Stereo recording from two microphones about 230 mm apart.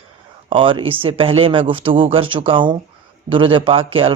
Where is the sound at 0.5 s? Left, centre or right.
Right.